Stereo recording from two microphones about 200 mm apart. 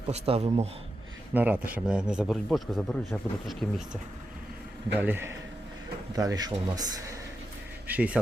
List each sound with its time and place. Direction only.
0.1 s speech: 30° right (ahead or behind)
1.3 s a man's voice: 10° right (ahead or behind)
4.9 s speech: 10° right (ahead or behind)
7.9 s speech: 5° right (ahead or behind)